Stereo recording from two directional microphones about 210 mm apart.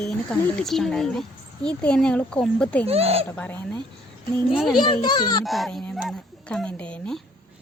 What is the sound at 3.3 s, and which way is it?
A woman's voice, 5° left (ahead or behind).